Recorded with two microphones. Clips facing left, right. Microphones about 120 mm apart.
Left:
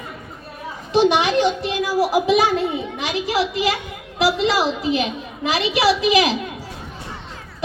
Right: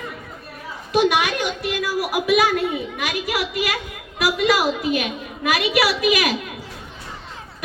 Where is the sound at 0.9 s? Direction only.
25° left (ahead or behind).